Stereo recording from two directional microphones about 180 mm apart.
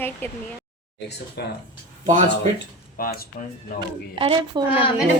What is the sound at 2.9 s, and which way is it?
Speech, 55° left (ahead or behind).